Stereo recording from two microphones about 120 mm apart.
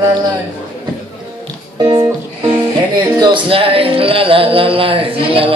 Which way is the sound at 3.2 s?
45° right (ahead or behind).